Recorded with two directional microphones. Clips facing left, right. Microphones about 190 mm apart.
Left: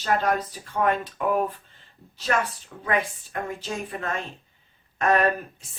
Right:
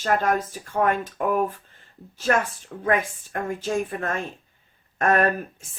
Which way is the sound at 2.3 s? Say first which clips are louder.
Right 3 dB; 50° right (ahead or behind).